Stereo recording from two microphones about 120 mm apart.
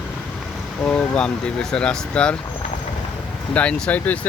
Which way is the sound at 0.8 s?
10° left (ahead or behind).